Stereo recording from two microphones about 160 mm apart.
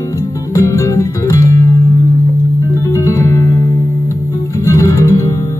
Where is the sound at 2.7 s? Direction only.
20° left (ahead or behind).